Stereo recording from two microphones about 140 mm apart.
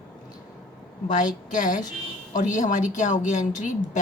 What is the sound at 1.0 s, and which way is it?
A woman's voice, 65° left (ahead or behind).